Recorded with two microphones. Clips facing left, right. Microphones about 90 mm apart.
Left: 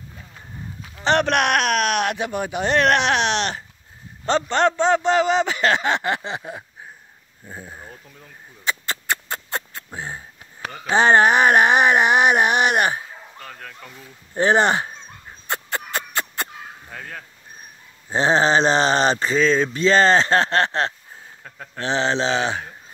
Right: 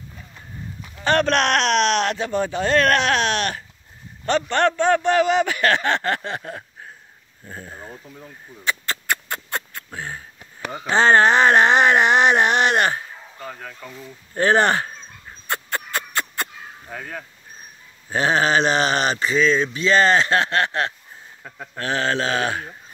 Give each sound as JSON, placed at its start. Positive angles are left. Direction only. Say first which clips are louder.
{"t": 1.0, "sound": "a man's voice", "louder": "even", "side_deg": 15}
{"t": 8.6, "sound": "a sound", "louder": "right 1 dB", "side_deg": 20}
{"t": 9.9, "sound": "a man's voice", "louder": "even", "side_deg": 20}
{"t": 13.4, "sound": "speech", "louder": "right 5 dB", "side_deg": -5}
{"t": 14.3, "sound": "dog", "louder": "even", "side_deg": 20}
{"t": 16.9, "sound": "speech", "louder": "right 4 dB", "side_deg": -5}
{"t": 18.1, "sound": "speech", "louder": "left 1 dB", "side_deg": 30}
{"t": 21.4, "sound": "a sound", "louder": "right 3 dB", "side_deg": -10}
{"t": 21.7, "sound": "a man's voice", "louder": "left 1 dB", "side_deg": 25}